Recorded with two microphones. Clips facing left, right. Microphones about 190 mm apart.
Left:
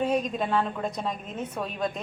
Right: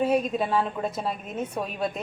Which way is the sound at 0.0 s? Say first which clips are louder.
Right 2 dB; 10° right (ahead or behind).